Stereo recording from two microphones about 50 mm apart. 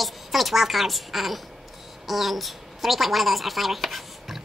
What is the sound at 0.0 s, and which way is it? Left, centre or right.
A woman's voice, centre.